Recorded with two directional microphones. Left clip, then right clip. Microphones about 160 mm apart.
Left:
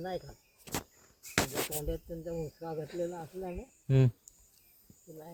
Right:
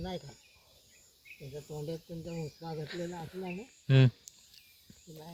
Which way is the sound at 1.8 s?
5° left (ahead or behind).